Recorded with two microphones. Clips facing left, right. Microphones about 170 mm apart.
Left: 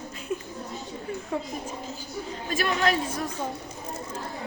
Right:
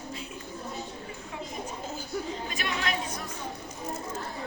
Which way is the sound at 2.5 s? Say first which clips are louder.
Left 10 dB; 40° left (ahead or behind).